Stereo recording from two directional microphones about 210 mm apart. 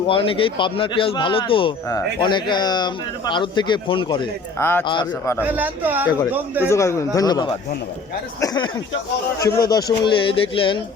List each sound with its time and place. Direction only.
0.1 s a man's voice: 25° left (ahead or behind)
4.5 s a man's voice: 10° left (ahead or behind)
5.5 s speech: 10° right (ahead or behind)
6.7 s a man's voice: 15° left (ahead or behind)